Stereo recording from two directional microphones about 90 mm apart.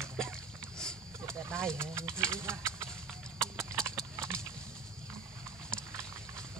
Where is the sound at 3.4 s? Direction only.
30° right (ahead or behind).